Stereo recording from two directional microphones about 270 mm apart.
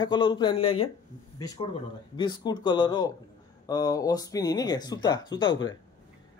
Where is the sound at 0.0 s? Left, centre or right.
Centre.